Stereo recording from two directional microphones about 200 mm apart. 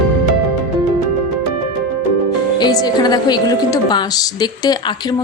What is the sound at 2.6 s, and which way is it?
A woman's voice, 20° left (ahead or behind).